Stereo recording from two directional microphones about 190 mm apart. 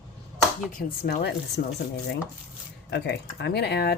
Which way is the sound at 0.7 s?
50° left (ahead or behind).